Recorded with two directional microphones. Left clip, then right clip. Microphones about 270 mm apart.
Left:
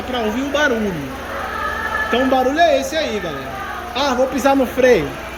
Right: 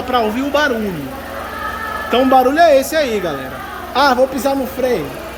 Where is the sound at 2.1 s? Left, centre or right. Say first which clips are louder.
Right 6 dB; centre.